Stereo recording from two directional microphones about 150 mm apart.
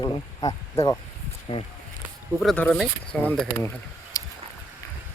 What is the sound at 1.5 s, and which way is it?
Speech, 40° left (ahead or behind).